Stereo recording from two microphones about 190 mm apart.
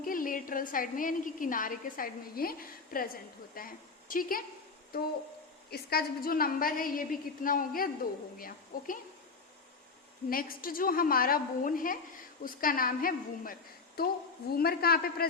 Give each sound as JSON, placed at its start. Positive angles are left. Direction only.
{"t": 0.0, "sound": "a woman's voice", "side_deg": 45}
{"t": 10.2, "sound": "a woman's voice", "side_deg": 50}